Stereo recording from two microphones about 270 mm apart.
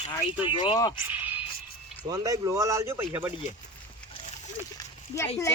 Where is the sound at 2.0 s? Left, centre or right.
Centre.